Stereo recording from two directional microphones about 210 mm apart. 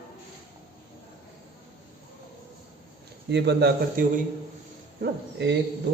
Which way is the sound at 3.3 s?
55° right (ahead or behind).